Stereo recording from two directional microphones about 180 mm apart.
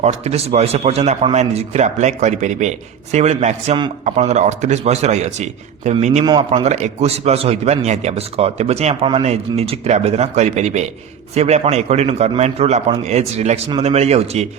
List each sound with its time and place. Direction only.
0.0 s a man's voice: 35° right (ahead or behind)
6.2 s a man's voice: 25° right (ahead or behind)